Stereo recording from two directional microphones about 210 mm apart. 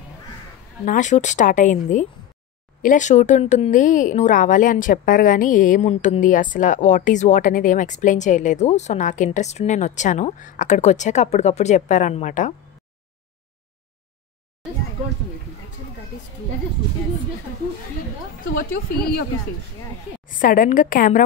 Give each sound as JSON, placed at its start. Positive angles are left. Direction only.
{"t": 0.8, "sound": "a woman's voice", "side_deg": 35}
{"t": 18.5, "sound": "a woman's voice", "side_deg": 45}
{"t": 20.3, "sound": "a woman's voice", "side_deg": 40}